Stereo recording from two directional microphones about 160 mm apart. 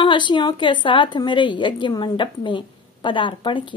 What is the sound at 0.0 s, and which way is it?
A woman's voice, 30° left (ahead or behind).